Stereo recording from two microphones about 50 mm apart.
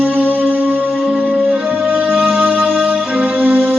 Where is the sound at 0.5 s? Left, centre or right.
Right.